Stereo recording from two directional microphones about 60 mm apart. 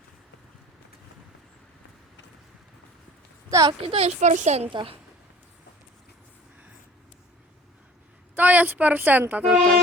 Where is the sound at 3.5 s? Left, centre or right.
Right.